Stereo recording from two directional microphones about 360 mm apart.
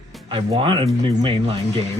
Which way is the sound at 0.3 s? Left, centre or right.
Centre.